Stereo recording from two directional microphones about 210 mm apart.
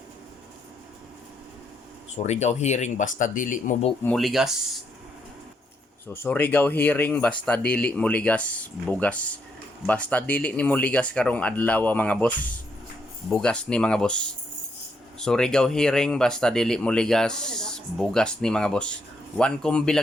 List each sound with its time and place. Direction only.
2.1 s speech: 30° left (ahead or behind)
4.0 s speech: centre (ahead or behind)
6.1 s speech: 10° left (ahead or behind)